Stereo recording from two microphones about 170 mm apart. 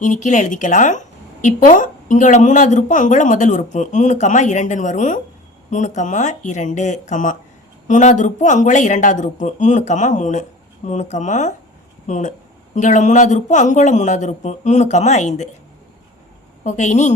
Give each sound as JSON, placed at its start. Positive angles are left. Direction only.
{"t": 0.0, "sound": "a woman's voice", "side_deg": 45}
{"t": 16.6, "sound": "a woman's voice", "side_deg": 45}